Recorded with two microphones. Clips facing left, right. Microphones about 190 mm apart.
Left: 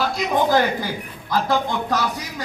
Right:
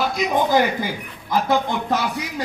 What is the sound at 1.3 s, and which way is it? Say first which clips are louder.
Speech: right 1 dB; 20° right (ahead or behind).